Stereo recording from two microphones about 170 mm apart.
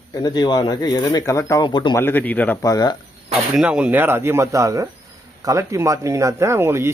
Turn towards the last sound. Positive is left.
turn(degrees=-15)  # may be behind; listen again after turning